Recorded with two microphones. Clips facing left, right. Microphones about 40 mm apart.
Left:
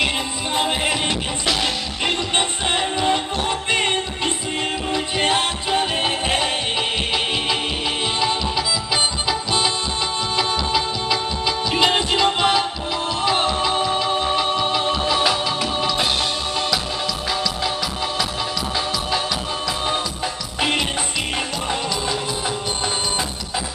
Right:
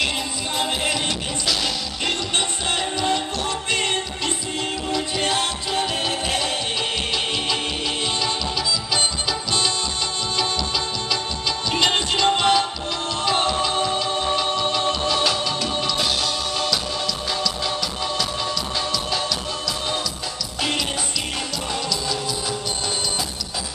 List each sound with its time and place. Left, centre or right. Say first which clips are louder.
1.5 s music: left 3 dB; left
4.9 s music: left 3 dB; left
8.9 s music: left 4 dB; centre